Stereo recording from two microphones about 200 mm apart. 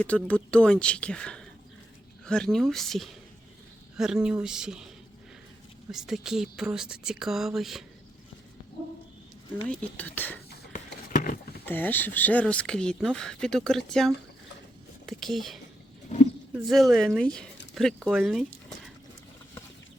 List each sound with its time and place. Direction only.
0.0 s speech: 5° left (ahead or behind)
5.9 s speech: centre (ahead or behind)
9.8 s speech: 10° left (ahead or behind)
11.1 s a sound: 45° left (ahead or behind)
11.6 s speech: 10° left (ahead or behind)
16.6 s speech: centre (ahead or behind)